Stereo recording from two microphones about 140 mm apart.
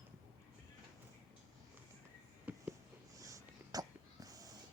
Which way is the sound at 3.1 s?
25° right (ahead or behind).